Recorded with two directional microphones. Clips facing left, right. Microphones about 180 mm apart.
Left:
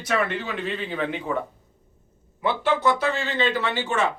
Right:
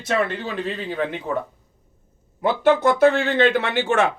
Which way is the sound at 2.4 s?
45° right (ahead or behind).